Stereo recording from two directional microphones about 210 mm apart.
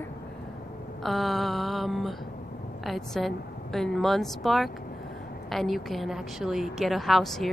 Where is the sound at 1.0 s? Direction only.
Centre (ahead or behind).